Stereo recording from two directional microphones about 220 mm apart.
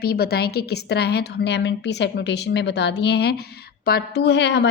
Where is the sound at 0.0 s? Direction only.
45° left (ahead or behind).